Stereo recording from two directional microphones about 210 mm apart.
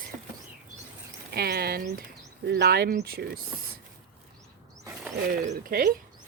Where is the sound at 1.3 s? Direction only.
50° right (ahead or behind).